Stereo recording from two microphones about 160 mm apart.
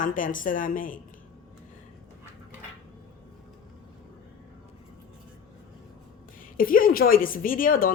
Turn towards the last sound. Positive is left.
turn(degrees=60)  # may be behind; listen again after turning